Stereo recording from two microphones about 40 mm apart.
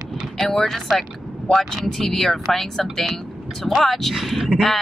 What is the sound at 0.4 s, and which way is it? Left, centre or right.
Speech, centre.